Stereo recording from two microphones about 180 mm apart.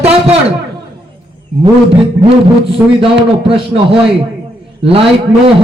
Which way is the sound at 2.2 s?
30° right (ahead or behind).